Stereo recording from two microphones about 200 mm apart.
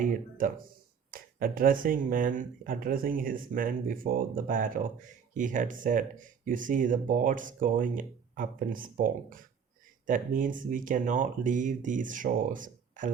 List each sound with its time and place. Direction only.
0.0 s speech: 40° right (ahead or behind)